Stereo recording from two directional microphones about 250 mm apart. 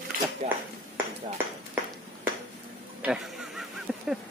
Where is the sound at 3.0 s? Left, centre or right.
Centre.